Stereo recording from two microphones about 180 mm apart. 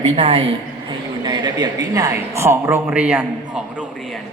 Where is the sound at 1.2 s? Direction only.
25° right (ahead or behind).